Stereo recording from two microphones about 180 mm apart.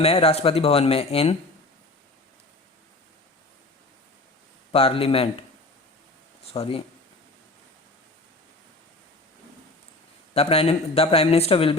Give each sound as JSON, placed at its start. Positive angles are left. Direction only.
{"t": 0.0, "sound": "a man's voice", "side_deg": 35}
{"t": 4.7, "sound": "a man's voice", "side_deg": 30}
{"t": 6.5, "sound": "a man's voice", "side_deg": 30}
{"t": 10.3, "sound": "a man's voice", "side_deg": 35}